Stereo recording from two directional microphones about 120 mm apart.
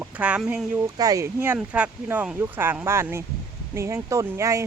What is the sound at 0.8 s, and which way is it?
Speech, 30° right (ahead or behind).